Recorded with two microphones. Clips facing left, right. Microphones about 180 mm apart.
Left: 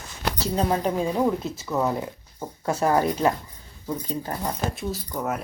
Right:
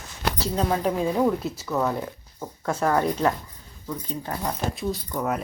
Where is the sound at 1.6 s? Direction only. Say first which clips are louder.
Left 1 dB; 10° left (ahead or behind).